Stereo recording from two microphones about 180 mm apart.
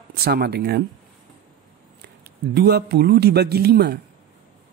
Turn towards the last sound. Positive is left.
turn(degrees=-65)  # may be behind; listen again after turning